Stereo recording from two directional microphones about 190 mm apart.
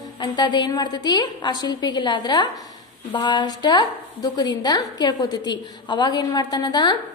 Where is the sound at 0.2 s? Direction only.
25° left (ahead or behind).